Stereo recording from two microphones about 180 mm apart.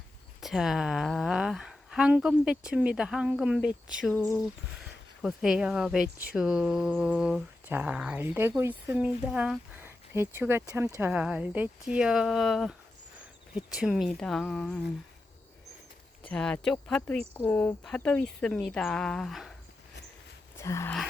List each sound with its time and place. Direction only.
0.4 s a woman's voice: centre (ahead or behind)
4.0 s speech: 10° left (ahead or behind)
5.2 s a woman's voice: 5° right (ahead or behind)
16.2 s a woman's voice: 5° left (ahead or behind)
20.6 s speech: 15° left (ahead or behind)